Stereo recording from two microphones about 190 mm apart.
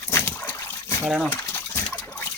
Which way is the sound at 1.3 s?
15° left (ahead or behind).